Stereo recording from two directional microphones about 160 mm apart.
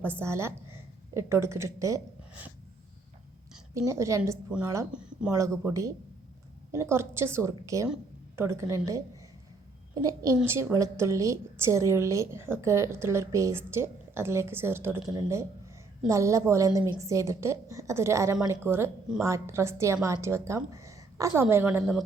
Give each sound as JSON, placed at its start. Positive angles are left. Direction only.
{"t": 0.2, "sound": "a woman's voice", "side_deg": -15}
{"t": 3.8, "sound": "a woman's voice", "side_deg": -20}
{"t": 4.9, "sound": "speech", "side_deg": -5}
{"t": 5.3, "sound": "a woman's voice", "side_deg": -20}